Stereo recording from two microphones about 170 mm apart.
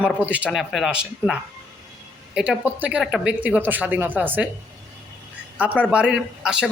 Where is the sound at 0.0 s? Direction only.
10° right (ahead or behind).